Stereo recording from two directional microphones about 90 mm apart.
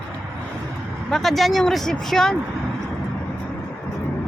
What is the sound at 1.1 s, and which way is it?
Speech, centre (ahead or behind).